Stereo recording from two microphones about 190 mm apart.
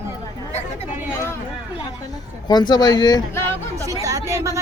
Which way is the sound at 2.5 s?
20° left (ahead or behind).